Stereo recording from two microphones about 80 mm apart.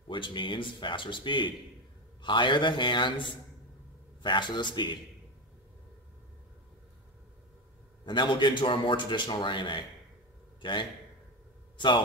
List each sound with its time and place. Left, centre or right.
0.1 s speech: left
4.2 s a man's voice: left
8.0 s a man's voice: left
11.7 s a sound: left